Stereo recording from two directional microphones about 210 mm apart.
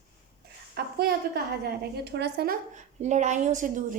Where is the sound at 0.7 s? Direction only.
50° right (ahead or behind).